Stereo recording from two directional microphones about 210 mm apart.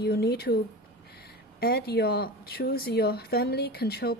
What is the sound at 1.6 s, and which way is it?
A woman's voice, 50° left (ahead or behind).